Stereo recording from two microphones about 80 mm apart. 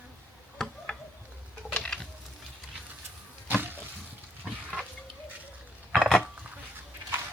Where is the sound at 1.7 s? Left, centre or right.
Centre.